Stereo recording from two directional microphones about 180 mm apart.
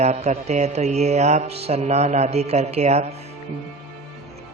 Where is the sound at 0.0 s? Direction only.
35° right (ahead or behind).